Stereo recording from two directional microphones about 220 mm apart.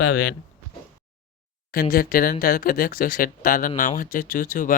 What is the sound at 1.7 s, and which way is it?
Speech, 45° left (ahead or behind).